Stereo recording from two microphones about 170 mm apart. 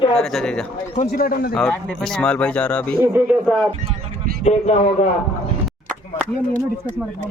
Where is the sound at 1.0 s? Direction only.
50° left (ahead or behind).